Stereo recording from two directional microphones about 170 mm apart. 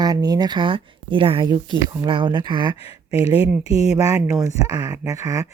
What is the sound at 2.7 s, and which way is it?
Speech, 35° left (ahead or behind).